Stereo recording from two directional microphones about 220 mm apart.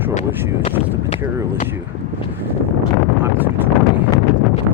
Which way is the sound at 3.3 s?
10° right (ahead or behind).